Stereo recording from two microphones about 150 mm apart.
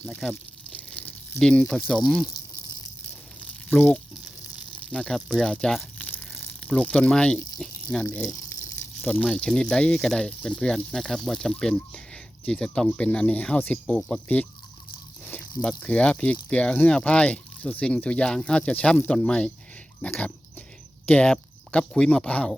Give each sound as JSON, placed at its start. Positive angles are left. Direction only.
{"t": 0.2, "sound": "a sound", "side_deg": 0}
{"t": 3.8, "sound": "speech", "side_deg": 10}
{"t": 6.0, "sound": "crumpling", "side_deg": 10}
{"t": 7.6, "sound": "speech", "side_deg": 5}
{"t": 8.3, "sound": "a sound", "side_deg": 20}
{"t": 9.0, "sound": "speech", "side_deg": 10}
{"t": 15.8, "sound": "speech", "side_deg": 10}
{"t": 20.0, "sound": "dog", "side_deg": 10}
{"t": 21.1, "sound": "speech", "side_deg": 5}